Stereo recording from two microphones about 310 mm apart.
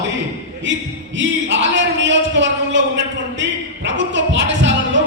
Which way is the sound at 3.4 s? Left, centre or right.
Right.